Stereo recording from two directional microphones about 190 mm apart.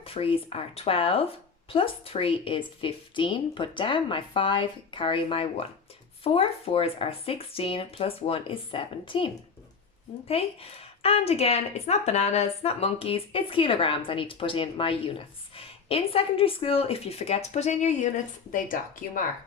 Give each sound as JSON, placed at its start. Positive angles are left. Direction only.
{"t": 0.0, "sound": "a woman's voice", "side_deg": 30}